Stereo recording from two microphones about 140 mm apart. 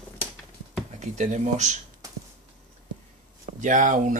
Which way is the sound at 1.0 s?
60° right (ahead or behind).